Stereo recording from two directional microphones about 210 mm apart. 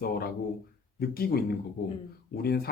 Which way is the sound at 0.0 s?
45° left (ahead or behind).